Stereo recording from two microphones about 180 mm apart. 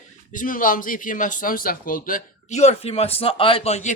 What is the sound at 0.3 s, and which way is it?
Speech, 50° left (ahead or behind).